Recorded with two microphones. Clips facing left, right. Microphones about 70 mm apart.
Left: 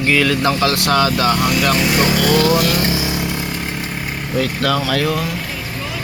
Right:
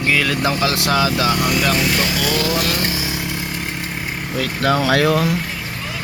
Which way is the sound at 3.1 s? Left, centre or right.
Centre.